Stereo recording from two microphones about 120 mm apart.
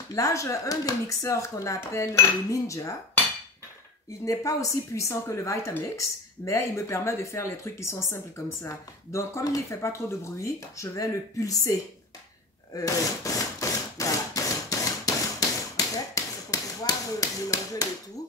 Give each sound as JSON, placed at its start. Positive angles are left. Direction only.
{"t": 0.1, "sound": "speech", "side_deg": 25}
{"t": 4.2, "sound": "speech", "side_deg": 30}
{"t": 12.7, "sound": "a sound", "side_deg": 30}
{"t": 15.7, "sound": "tap", "side_deg": 30}